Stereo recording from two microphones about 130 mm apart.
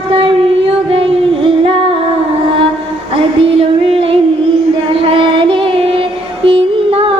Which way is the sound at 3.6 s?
45° right (ahead or behind).